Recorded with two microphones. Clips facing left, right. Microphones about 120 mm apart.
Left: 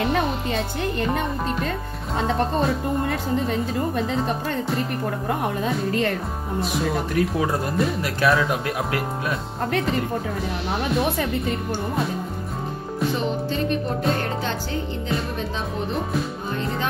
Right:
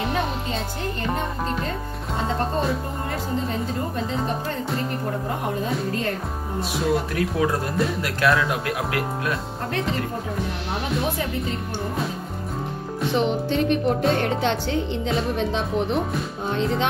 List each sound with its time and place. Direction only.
7.2 s speech: centre (ahead or behind)
13.5 s music: 80° right
14.0 s speech: centre (ahead or behind)
14.4 s music: 90° right